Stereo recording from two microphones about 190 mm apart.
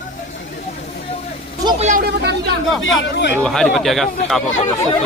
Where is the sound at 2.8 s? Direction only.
75° left (ahead or behind).